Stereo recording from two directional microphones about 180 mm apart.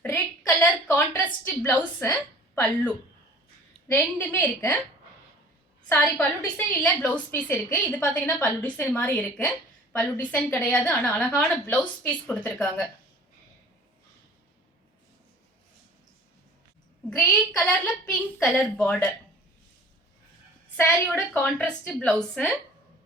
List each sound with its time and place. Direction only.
0.0 s a sound: 10° left (ahead or behind)
3.8 s a woman's voice: 10° left (ahead or behind)
5.9 s a woman's voice: 10° left (ahead or behind)
17.1 s a woman's voice: 5° left (ahead or behind)
21.1 s a woman's voice: 5° left (ahead or behind)